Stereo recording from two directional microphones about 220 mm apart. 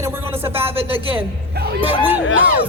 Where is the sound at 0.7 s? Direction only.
25° right (ahead or behind).